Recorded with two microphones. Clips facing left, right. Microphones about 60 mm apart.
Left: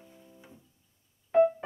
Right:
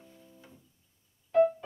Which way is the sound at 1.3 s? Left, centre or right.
Left.